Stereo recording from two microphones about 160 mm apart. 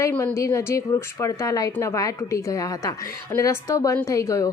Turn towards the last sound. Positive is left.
turn(degrees=20)  # may be behind; listen again after turning